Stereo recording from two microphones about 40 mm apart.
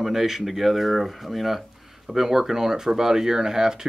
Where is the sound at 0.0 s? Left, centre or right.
Centre.